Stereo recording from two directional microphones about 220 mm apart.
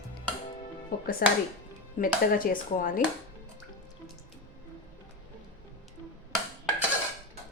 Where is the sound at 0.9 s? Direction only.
40° left (ahead or behind).